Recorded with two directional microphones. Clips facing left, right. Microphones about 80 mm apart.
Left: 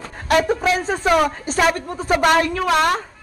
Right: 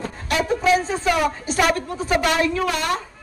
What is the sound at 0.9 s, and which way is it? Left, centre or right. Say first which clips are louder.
Speech: left 3 dB; left.